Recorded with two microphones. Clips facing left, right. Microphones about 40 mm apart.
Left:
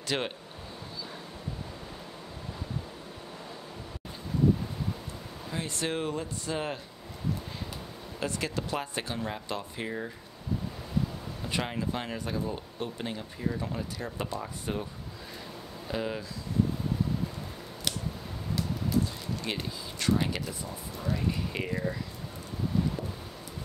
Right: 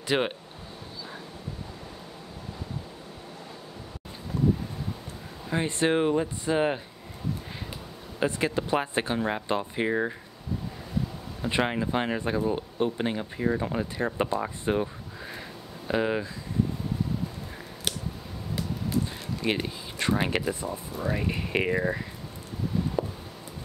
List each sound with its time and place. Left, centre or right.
0.1 s speech: centre
5.5 s speech: right
8.2 s speech: right
11.4 s speech: right
15.9 s speech: right
19.4 s speech: right
23.0 s a sound: right